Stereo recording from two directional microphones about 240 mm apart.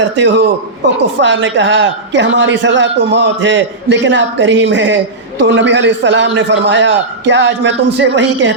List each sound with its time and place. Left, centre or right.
0.0 s a man's voice: right